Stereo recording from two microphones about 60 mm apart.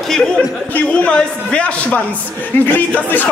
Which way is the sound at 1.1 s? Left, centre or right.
Centre.